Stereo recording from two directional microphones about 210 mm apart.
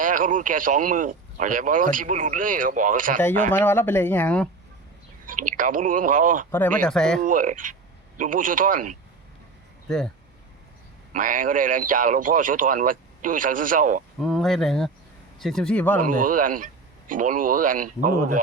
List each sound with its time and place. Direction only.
0.0 s speech: 40° right (ahead or behind)
3.5 s speech: 10° left (ahead or behind)
5.2 s speech: 40° right (ahead or behind)
6.5 s speech: 5° left (ahead or behind)
7.2 s speech: 40° right (ahead or behind)
11.1 s speech: 40° right (ahead or behind)
14.2 s speech: centre (ahead or behind)
16.0 s speech: 40° right (ahead or behind)